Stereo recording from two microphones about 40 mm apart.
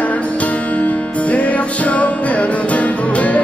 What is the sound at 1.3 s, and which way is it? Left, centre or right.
Music, left.